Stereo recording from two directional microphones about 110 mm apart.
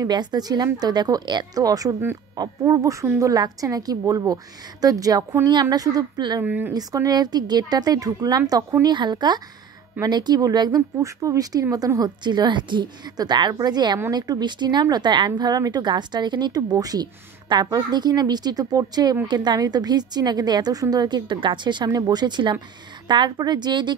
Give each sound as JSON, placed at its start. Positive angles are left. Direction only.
{"t": 0.0, "sound": "speech", "side_deg": -40}
{"t": 6.4, "sound": "speech", "side_deg": -15}
{"t": 6.7, "sound": "a woman's voice", "side_deg": -35}